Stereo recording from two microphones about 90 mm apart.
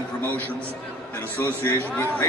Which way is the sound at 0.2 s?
20° left (ahead or behind).